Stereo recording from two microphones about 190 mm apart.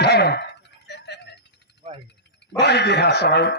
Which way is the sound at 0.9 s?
65° left (ahead or behind).